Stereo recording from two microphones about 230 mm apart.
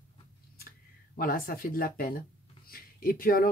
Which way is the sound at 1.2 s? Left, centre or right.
Left.